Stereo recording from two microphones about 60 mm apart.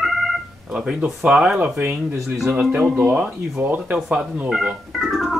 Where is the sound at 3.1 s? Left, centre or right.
Right.